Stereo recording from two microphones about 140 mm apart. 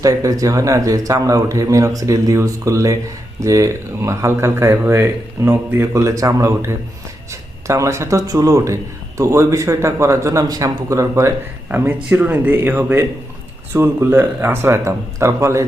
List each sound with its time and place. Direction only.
0.0 s a man's voice: 25° right (ahead or behind)